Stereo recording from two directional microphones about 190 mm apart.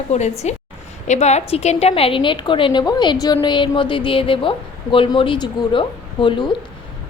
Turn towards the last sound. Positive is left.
turn(degrees=25)  # may be behind; listen again after turning